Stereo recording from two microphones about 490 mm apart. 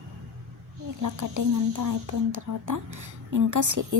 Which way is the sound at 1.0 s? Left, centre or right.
Right.